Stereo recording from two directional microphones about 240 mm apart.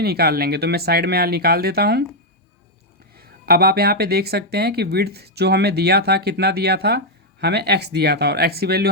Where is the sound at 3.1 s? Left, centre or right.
Right.